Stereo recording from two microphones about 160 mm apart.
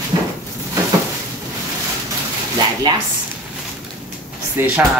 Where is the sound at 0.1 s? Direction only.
30° right (ahead or behind).